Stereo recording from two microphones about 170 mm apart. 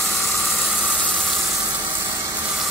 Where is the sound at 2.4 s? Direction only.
10° right (ahead or behind).